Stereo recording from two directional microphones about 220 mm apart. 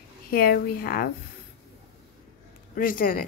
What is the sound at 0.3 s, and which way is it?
Speech, 40° left (ahead or behind).